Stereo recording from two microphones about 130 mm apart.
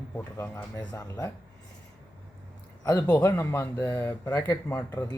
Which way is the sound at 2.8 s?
30° left (ahead or behind).